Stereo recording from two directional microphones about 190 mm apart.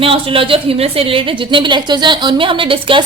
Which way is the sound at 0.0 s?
30° right (ahead or behind).